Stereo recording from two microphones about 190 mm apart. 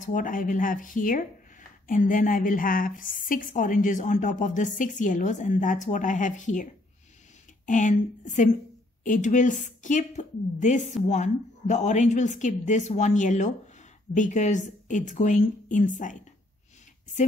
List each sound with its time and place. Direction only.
0.0 s a woman's voice: 45° left (ahead or behind)